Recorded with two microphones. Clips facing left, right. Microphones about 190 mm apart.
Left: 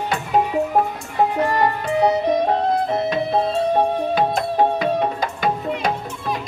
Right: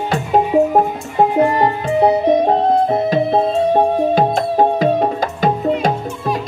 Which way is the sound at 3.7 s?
40° right (ahead or behind).